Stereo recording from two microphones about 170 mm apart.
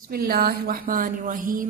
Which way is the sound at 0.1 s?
60° right (ahead or behind).